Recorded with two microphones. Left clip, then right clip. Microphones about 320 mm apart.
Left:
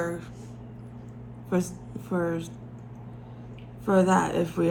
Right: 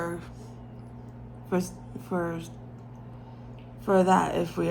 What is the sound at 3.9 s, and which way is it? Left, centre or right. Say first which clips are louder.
Speech: right 1 dB; centre.